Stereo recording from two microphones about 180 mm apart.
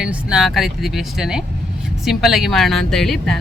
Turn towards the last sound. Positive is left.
turn(degrees=0)  # may be behind; listen again after turning